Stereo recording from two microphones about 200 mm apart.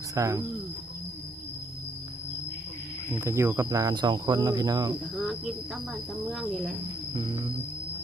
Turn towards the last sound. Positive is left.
turn(degrees=-20)  # may be behind; listen again after turning